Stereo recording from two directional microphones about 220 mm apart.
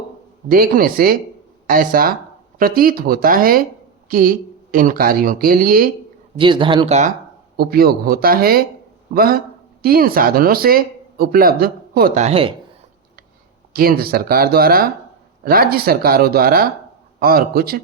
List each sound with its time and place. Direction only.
0.4 s speech: 40° right (ahead or behind)
6.3 s speech: 20° right (ahead or behind)
7.5 s speech: 45° right (ahead or behind); by 12.5 s 25° right (ahead or behind)
13.7 s speech: 40° right (ahead or behind)